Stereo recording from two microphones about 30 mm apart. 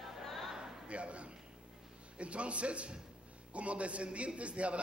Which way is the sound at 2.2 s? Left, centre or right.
Right.